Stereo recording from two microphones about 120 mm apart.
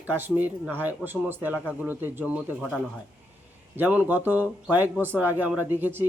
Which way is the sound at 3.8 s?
15° right (ahead or behind).